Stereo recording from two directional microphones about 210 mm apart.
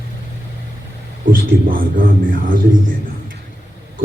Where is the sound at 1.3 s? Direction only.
40° right (ahead or behind).